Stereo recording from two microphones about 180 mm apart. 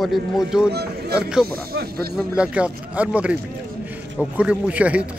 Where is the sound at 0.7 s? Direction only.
65° right (ahead or behind).